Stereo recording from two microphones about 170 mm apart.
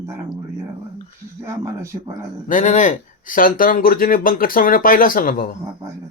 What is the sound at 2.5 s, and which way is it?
Speech, 50° left (ahead or behind).